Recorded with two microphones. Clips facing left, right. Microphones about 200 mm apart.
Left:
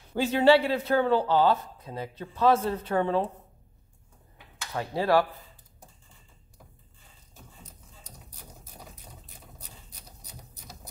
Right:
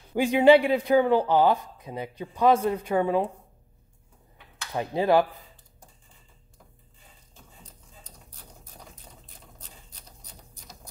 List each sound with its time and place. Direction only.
0.1 s speech: 15° right (ahead or behind)
4.7 s speech: 20° right (ahead or behind)